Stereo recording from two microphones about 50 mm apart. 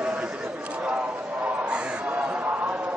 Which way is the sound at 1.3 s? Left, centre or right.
Right.